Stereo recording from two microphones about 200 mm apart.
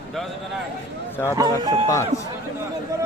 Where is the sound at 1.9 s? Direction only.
15° left (ahead or behind).